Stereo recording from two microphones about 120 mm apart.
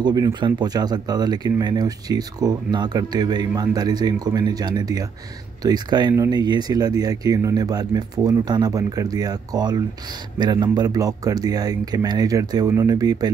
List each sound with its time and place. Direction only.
0.0 s speech: 40° right (ahead or behind)